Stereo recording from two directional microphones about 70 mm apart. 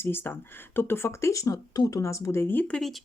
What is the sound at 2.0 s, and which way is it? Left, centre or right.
Speech, left.